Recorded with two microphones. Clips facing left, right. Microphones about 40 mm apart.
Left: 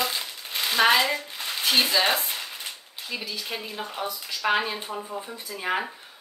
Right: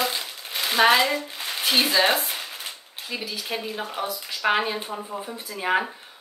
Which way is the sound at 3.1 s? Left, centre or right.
Centre.